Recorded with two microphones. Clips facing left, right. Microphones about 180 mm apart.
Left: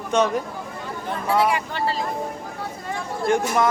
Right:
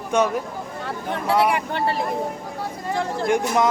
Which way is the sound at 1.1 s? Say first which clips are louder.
Right 1 dB; 65° right (ahead or behind).